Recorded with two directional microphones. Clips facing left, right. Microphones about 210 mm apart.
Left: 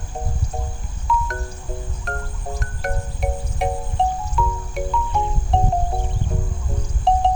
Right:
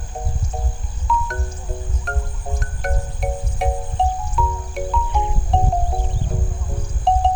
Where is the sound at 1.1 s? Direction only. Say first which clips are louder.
Even; centre (ahead or behind).